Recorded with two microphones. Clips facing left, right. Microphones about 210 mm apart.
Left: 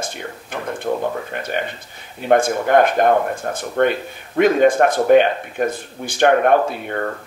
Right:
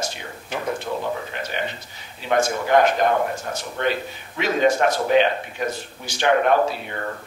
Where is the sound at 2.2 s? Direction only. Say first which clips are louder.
Left 5 dB; 55° left (ahead or behind).